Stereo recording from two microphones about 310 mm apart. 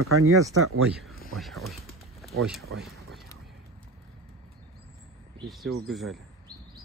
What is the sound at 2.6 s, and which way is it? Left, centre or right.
Speech, right.